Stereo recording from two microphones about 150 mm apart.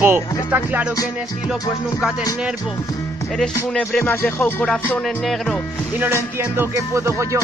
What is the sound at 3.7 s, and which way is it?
Music, 10° left (ahead or behind).